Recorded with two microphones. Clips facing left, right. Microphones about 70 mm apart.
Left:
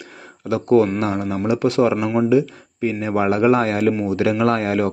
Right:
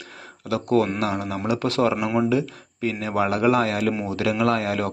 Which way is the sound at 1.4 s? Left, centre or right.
Left.